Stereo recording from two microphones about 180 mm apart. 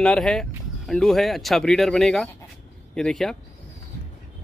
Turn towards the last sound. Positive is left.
turn(degrees=0)  # may be behind; listen again after turning